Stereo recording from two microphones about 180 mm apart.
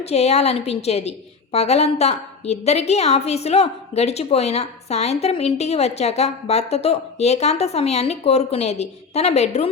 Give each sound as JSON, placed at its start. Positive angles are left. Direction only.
{"t": 0.0, "sound": "a woman's voice", "side_deg": 35}